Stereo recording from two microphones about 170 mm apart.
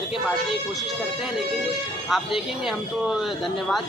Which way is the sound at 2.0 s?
Centre (ahead or behind).